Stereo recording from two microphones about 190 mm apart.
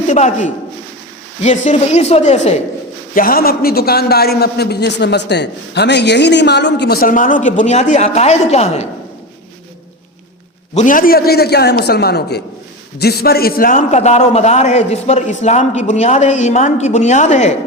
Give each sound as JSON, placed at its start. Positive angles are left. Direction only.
{"t": 0.1, "sound": "a man's voice", "side_deg": 40}
{"t": 3.2, "sound": "a man's voice", "side_deg": 50}
{"t": 10.8, "sound": "a man's voice", "side_deg": 45}